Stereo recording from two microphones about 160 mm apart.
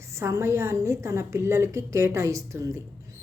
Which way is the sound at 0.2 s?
15° right (ahead or behind).